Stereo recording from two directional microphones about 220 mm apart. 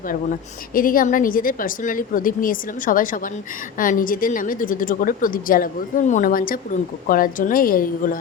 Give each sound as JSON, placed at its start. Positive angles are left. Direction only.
{"t": 0.7, "sound": "a woman's voice", "side_deg": 40}